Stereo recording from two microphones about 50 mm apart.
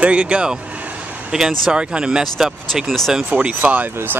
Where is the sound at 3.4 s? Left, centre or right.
Right.